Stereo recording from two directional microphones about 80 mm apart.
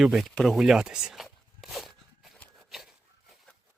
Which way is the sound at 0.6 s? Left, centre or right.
Centre.